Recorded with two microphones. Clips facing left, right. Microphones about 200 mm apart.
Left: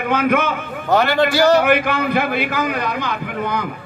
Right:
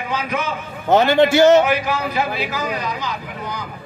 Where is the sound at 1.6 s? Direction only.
60° left (ahead or behind).